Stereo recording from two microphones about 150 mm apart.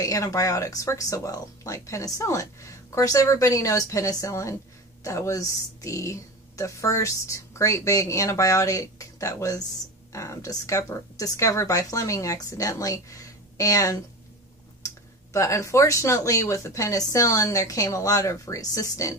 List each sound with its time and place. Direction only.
0.0 s speech: 20° left (ahead or behind)
15.3 s speech: 20° left (ahead or behind)